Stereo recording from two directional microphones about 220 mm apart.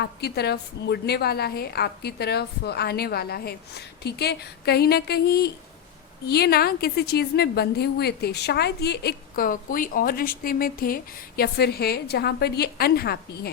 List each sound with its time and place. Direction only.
0.0 s a woman's voice: 45° left (ahead or behind)